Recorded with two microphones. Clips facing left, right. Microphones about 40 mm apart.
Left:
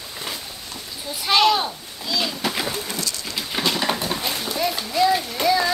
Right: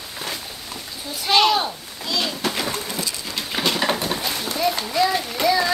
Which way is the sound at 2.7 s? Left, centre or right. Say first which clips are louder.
Right 1 dB; centre.